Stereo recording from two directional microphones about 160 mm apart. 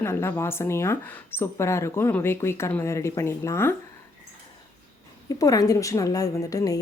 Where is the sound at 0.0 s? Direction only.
15° left (ahead or behind).